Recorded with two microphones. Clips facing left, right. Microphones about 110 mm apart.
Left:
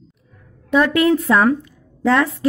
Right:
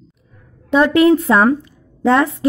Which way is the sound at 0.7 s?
25° right (ahead or behind).